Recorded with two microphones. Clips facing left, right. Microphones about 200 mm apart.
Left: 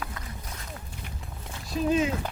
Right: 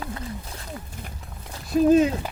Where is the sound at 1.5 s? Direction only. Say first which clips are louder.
Right 9 dB; 40° right (ahead or behind).